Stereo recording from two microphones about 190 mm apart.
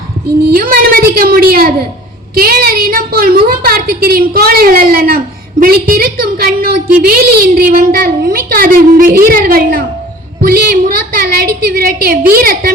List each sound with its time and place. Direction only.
0.4 s a woman's voice: 50° right (ahead or behind)